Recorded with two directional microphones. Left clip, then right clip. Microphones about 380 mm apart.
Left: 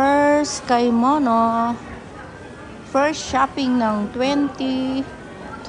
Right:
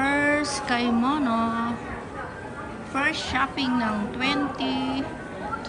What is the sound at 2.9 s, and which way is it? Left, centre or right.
Speech, centre.